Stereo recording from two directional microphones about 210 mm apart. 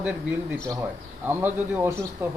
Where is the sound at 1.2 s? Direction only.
10° right (ahead or behind).